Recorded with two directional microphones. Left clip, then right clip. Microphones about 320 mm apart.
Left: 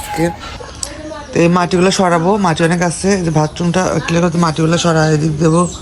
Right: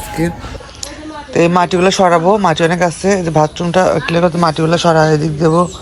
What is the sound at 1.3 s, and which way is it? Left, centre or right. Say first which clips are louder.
Speech: right 1 dB; centre.